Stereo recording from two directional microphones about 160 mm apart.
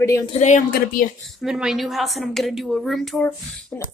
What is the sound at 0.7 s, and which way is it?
Speech, 60° left (ahead or behind).